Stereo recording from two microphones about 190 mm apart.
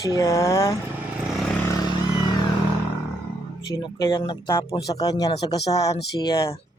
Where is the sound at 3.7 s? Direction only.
20° left (ahead or behind).